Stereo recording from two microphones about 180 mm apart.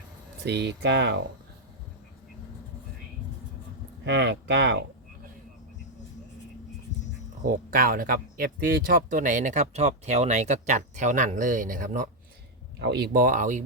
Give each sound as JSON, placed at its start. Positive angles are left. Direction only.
{"t": 0.4, "sound": "speech", "side_deg": -70}
{"t": 4.0, "sound": "speech", "side_deg": -75}
{"t": 7.4, "sound": "speech", "side_deg": -50}
{"t": 12.8, "sound": "speech", "side_deg": -65}
{"t": 13.2, "sound": "speech", "side_deg": -45}